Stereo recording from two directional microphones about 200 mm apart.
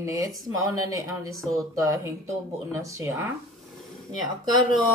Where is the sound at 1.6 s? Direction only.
15° right (ahead or behind).